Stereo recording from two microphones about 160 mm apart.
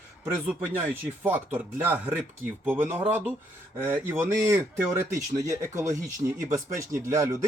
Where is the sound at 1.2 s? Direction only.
10° right (ahead or behind).